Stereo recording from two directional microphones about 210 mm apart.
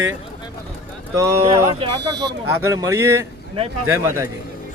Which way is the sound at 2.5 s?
10° right (ahead or behind).